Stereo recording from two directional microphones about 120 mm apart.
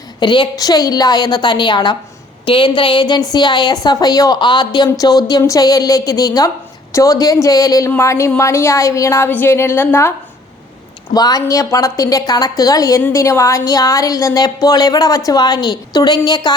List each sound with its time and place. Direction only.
0.2 s a woman's voice: 40° left (ahead or behind); by 10.1 s 20° left (ahead or behind)
11.1 s a woman's voice: 30° left (ahead or behind)